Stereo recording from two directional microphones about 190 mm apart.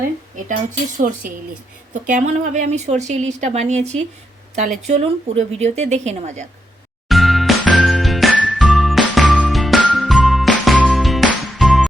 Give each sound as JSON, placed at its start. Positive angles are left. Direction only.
{"t": 1.0, "sound": "a woman's voice", "side_deg": -45}
{"t": 7.1, "sound": "jingle", "side_deg": 0}